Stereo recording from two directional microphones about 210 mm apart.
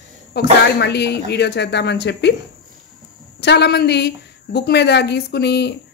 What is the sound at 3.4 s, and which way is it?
Speech, 50° left (ahead or behind).